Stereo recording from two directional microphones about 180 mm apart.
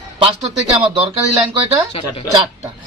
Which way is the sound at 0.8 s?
30° right (ahead or behind).